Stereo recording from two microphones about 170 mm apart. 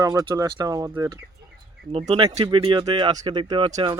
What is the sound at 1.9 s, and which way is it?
Speech, 35° right (ahead or behind).